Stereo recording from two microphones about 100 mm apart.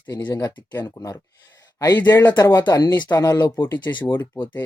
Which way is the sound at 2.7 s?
40° left (ahead or behind).